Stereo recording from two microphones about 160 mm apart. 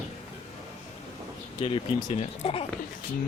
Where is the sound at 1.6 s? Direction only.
35° left (ahead or behind).